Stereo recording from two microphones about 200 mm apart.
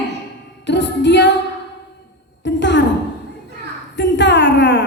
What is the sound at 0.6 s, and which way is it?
Female singing, 60° left (ahead or behind).